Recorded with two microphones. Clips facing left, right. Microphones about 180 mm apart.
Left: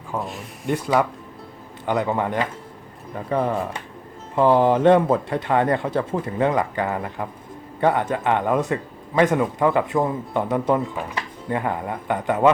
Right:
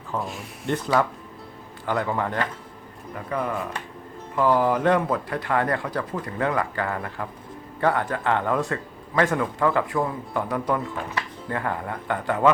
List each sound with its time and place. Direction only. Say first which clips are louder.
0.2 s speech: left 1 dB; centre (ahead or behind)
1.9 s a man's voice: left 3 dB; 20° left (ahead or behind)
3.2 s a man's voice: left 5 dB; 30° left (ahead or behind)